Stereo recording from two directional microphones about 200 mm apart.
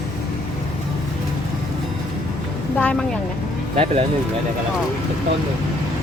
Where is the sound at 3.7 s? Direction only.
30° right (ahead or behind).